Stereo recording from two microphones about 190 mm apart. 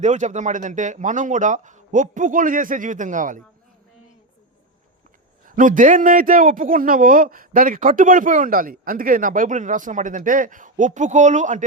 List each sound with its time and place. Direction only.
0.0 s a man's voice: 40° right (ahead or behind)
5.5 s a man's voice: 45° right (ahead or behind)